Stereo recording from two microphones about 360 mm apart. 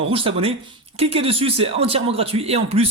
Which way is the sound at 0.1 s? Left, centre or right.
Centre.